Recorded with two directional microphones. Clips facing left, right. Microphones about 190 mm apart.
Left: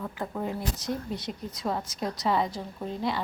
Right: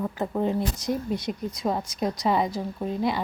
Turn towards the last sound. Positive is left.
turn(degrees=-15)  # may be behind; listen again after turning